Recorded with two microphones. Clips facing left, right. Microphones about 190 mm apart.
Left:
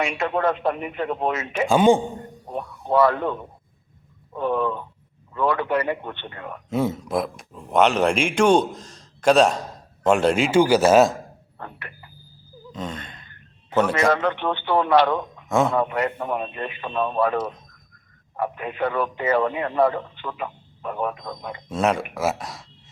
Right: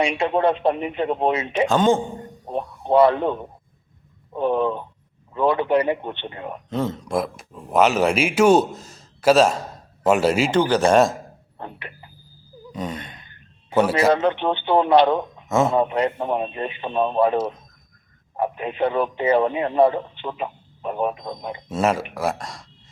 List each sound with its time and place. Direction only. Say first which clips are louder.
0.0 s speech: right 3 dB; 30° right (ahead or behind)
1.6 s speech: left 2 dB; 10° left (ahead or behind)
2.5 s speech: right 3 dB; 25° right (ahead or behind)
4.4 s speech: right 3 dB; 25° right (ahead or behind)
6.7 s speech: left 2 dB; 10° left (ahead or behind)
10.5 s speech: left 3 dB; 10° left (ahead or behind)
11.5 s speech: right 3 dB; 25° right (ahead or behind)
12.7 s gasp: right 2 dB; 10° right (ahead or behind)
13.7 s a man's voice: right 2 dB; 10° right (ahead or behind)
14.1 s speech: right 3 dB; 25° right (ahead or behind)
15.4 s speech: right 1 dB; centre (ahead or behind)
15.7 s speech: right 3 dB; 25° right (ahead or behind)
21.7 s speech: right 1 dB; 5° right (ahead or behind)